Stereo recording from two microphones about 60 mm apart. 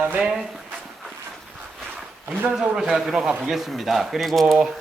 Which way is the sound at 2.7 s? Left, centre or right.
Centre.